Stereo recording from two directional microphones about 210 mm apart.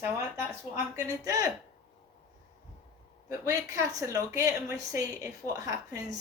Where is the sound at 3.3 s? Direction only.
15° right (ahead or behind).